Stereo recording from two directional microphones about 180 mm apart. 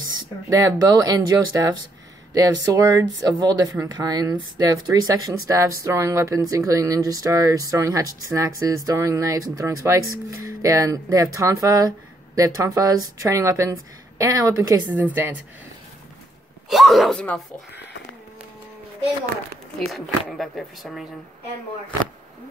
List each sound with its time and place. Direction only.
0.5 s speech: 20° right (ahead or behind)
16.6 s speech: centre (ahead or behind)
19.9 s speech: centre (ahead or behind)